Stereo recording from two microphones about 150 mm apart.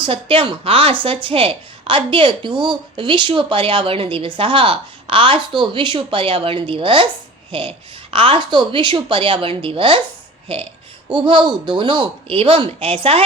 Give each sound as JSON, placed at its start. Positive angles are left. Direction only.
{"t": 0.0, "sound": "a woman's voice", "side_deg": -35}